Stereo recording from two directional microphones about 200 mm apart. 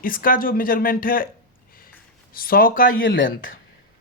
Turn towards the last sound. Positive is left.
turn(degrees=45)  # may be behind; listen again after turning